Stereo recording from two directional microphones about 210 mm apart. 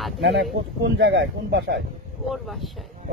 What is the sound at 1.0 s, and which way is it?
Speech, 65° right (ahead or behind).